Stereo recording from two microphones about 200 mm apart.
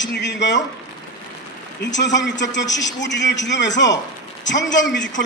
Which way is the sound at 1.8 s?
60° left (ahead or behind).